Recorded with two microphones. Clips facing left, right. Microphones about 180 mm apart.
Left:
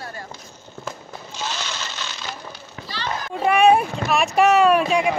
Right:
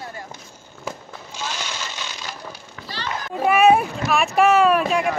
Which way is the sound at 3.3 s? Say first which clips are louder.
Even; 5° right (ahead or behind).